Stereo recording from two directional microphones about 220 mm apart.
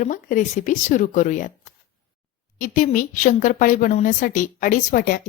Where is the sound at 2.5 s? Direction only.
35° left (ahead or behind).